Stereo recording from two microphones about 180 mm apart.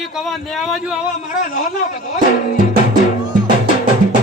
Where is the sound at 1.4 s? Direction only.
45° left (ahead or behind).